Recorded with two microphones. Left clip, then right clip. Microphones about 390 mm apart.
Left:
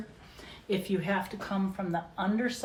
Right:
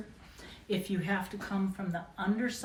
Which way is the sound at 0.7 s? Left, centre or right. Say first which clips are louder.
Left 3 dB; centre.